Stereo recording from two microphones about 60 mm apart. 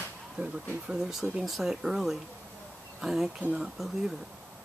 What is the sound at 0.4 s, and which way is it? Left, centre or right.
Speech, right.